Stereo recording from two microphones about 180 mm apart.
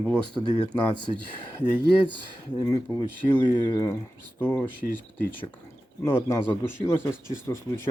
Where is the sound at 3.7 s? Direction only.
20° left (ahead or behind).